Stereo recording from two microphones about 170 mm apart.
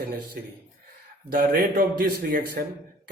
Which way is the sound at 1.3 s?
60° right (ahead or behind).